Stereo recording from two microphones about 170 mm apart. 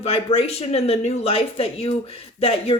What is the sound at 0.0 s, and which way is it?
A woman's voice, 35° left (ahead or behind).